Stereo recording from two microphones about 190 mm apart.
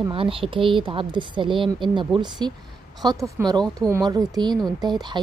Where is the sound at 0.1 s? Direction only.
30° right (ahead or behind).